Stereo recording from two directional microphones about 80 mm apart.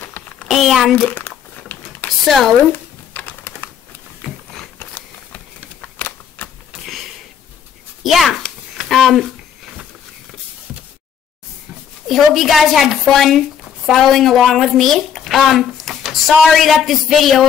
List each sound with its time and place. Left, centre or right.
0.5 s speech: centre
1.0 s crumpling: left
2.2 s speech: centre
3.1 s typing: left
4.7 s a sound: left
5.8 s typewriter: left
8.0 s a sound: centre
12.1 s a woman's voice: centre